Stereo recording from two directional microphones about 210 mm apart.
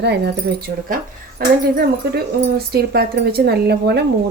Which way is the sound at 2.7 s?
50° right (ahead or behind).